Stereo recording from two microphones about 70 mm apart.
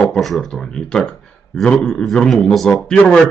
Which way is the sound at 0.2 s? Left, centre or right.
Centre.